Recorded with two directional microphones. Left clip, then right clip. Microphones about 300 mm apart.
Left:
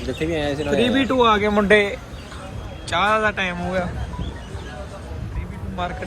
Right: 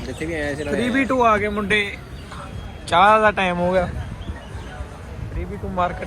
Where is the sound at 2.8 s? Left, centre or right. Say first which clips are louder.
Right 5 dB; centre.